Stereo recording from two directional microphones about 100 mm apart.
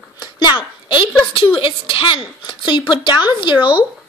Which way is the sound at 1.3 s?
60° left (ahead or behind).